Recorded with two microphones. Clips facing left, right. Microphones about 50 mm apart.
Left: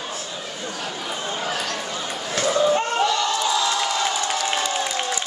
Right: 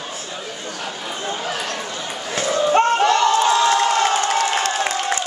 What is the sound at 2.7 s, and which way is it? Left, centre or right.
Crowd, right.